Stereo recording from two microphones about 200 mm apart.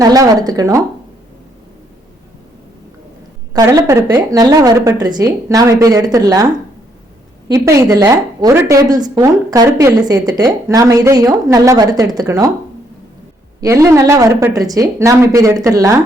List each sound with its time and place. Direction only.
0.0 s speech: 20° right (ahead or behind)
3.5 s speech: 15° right (ahead or behind)
13.6 s speech: 15° right (ahead or behind)